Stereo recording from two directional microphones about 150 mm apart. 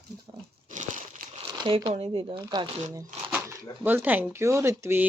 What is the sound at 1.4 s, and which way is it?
Crumpling, 30° right (ahead or behind).